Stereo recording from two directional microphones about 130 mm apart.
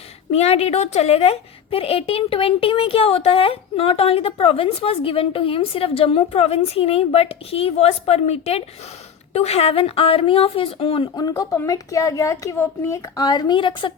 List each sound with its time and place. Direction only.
0.3 s a woman's voice: 55° left (ahead or behind)
11.1 s a woman's voice: 30° left (ahead or behind)